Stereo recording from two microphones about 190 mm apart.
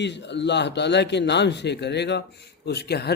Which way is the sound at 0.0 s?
65° left (ahead or behind).